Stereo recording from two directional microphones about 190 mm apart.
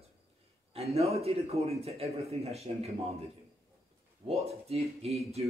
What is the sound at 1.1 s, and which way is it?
A man's voice, 30° right (ahead or behind).